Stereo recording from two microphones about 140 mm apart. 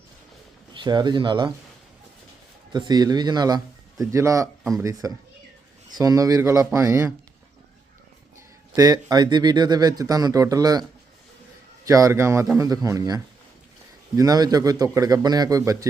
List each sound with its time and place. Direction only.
0.7 s speech: 35° right (ahead or behind)
2.7 s speech: 30° right (ahead or behind)
8.7 s speech: 25° right (ahead or behind)
11.9 s speech: 20° right (ahead or behind)